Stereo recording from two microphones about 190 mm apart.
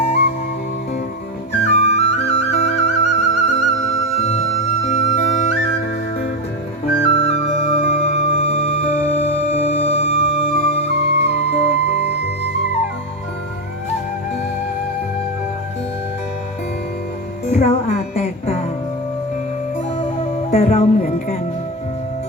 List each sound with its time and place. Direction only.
1.6 s flute: 35° left (ahead or behind)
7.0 s flute: 35° left (ahead or behind)
17.5 s music: 35° left (ahead or behind)
20.0 s music: 30° left (ahead or behind)